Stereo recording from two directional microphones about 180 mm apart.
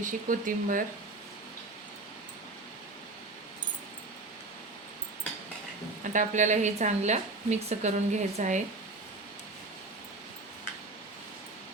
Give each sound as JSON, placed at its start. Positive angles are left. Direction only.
{"t": 0.0, "sound": "speech", "side_deg": -50}
{"t": 6.0, "sound": "a woman's voice", "side_deg": -45}